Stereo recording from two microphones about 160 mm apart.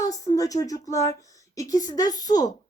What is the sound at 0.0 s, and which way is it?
Speech, 20° left (ahead or behind).